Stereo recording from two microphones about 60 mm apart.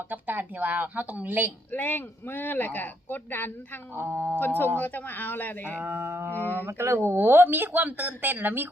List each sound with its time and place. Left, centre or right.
0.1 s speech: right
1.7 s speech: left
3.9 s speech: right
4.4 s speech: left
5.8 s speech: right
6.3 s speech: left
6.7 s speech: right